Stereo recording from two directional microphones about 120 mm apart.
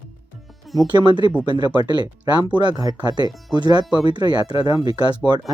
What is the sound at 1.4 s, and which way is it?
Speech, 40° right (ahead or behind).